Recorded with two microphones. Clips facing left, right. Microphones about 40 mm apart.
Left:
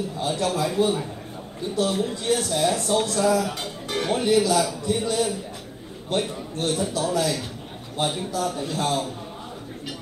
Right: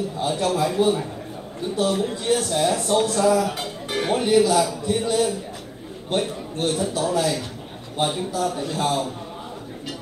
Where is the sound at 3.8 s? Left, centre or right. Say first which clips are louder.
Right 1 dB; right.